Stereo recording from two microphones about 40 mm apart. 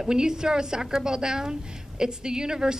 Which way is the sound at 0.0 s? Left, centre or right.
Centre.